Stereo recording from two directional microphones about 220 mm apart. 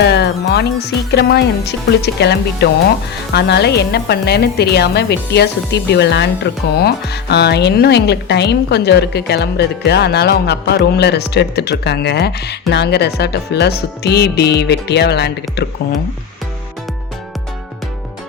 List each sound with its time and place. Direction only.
0.0 s a woman's voice: 50° left (ahead or behind)